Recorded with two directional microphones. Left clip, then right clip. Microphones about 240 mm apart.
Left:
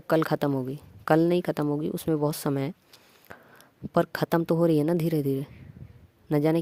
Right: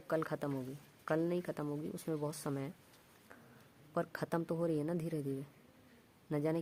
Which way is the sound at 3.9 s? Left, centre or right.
Left.